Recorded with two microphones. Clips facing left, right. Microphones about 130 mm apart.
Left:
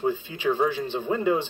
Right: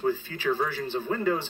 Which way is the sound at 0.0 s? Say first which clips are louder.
Left 2 dB; 15° left (ahead or behind).